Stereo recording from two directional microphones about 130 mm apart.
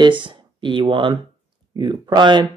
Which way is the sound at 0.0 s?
40° right (ahead or behind).